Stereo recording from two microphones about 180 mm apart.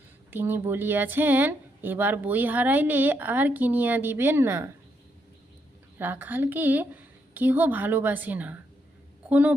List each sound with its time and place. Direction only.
0.3 s speech: 10° right (ahead or behind)
6.0 s speech: 10° right (ahead or behind)